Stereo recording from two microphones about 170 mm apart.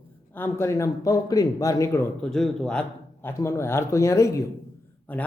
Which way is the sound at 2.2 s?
Centre (ahead or behind).